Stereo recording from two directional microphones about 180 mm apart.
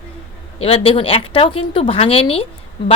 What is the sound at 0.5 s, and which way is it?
A woman's voice, 30° left (ahead or behind).